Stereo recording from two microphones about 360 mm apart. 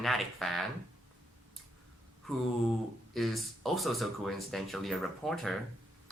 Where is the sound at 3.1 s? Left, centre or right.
Centre.